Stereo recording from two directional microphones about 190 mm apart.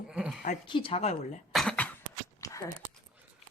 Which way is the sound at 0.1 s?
5° right (ahead or behind).